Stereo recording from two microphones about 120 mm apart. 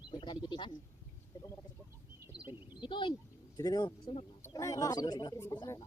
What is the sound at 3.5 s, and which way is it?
Speech, 35° left (ahead or behind).